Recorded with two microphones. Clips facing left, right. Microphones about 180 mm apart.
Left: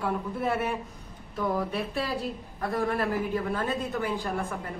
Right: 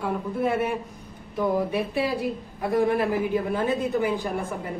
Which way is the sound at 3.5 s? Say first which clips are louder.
Right 6 dB; 15° right (ahead or behind).